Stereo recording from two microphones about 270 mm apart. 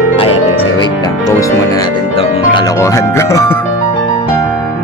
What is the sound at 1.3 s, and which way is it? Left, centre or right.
Speech, centre.